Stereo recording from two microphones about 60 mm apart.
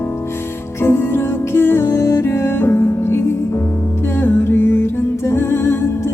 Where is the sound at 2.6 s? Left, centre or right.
Left.